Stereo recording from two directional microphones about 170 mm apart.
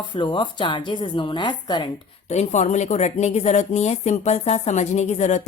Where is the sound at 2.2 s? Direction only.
40° left (ahead or behind).